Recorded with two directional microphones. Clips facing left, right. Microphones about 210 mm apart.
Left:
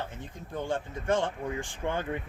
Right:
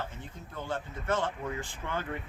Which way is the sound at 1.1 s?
15° left (ahead or behind).